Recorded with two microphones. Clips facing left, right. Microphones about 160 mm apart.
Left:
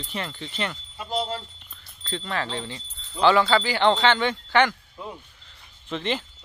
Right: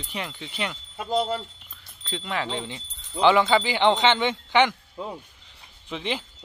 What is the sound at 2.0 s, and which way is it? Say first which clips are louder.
Speech: even; 10° right (ahead or behind).